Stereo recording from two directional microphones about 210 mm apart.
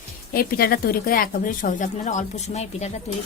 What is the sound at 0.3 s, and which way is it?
A woman's voice, 45° left (ahead or behind).